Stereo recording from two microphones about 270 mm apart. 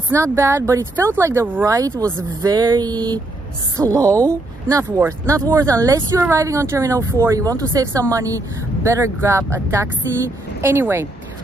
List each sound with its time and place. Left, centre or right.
0.1 s speech: centre